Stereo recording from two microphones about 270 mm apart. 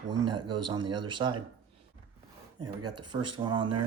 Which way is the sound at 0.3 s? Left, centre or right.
Centre.